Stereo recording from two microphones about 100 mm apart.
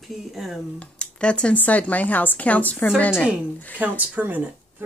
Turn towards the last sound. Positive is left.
turn(degrees=-15)  # may be behind; listen again after turning